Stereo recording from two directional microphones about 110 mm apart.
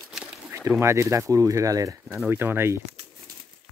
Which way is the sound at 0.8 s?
25° right (ahead or behind).